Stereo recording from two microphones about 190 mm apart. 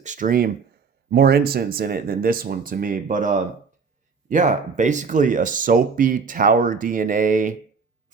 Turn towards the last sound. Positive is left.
turn(degrees=-45)  # may be behind; listen again after turning